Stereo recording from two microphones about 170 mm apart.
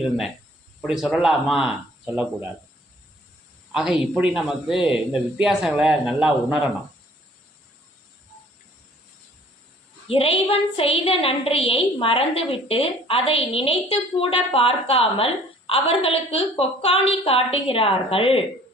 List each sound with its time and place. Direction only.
0.8 s speech: centre (ahead or behind)
3.7 s a woman's voice: 5° right (ahead or behind)
10.1 s a woman's voice: 35° left (ahead or behind)